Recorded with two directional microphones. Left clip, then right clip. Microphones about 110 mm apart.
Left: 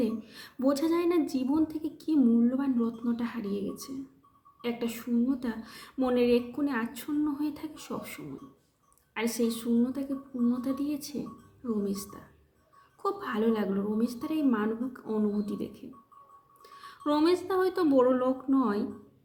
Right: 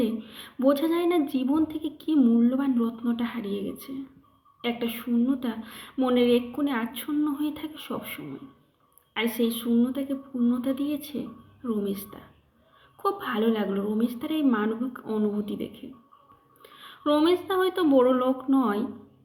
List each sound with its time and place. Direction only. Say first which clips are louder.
0.0 s a woman's voice: right 3 dB; 30° left (ahead or behind)
9.3 s a woman's voice: right 2 dB; 25° left (ahead or behind)
16.6 s a woman's voice: right 5 dB; 30° left (ahead or behind)